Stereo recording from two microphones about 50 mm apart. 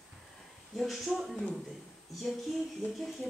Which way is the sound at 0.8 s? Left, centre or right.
Centre.